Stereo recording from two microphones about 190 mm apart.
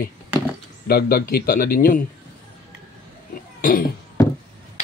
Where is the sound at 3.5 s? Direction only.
50° left (ahead or behind).